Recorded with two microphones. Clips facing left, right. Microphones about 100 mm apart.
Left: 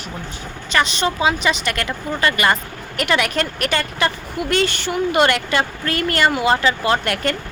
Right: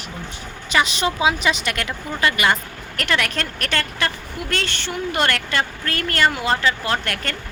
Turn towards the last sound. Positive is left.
turn(degrees=5)  # may be behind; listen again after turning